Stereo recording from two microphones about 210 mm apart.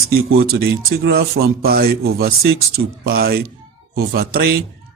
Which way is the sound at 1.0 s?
50° right (ahead or behind).